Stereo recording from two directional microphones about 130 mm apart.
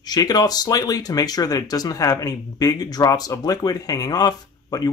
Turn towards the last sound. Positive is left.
turn(degrees=30)  # may be behind; listen again after turning